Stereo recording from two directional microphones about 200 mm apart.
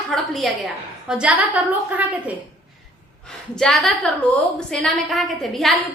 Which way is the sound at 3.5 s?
Centre (ahead or behind).